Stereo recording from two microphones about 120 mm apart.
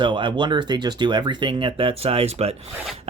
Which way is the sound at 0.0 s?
40° right (ahead or behind).